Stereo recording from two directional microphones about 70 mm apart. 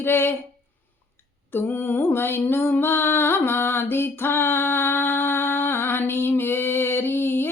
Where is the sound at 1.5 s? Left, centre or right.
Left.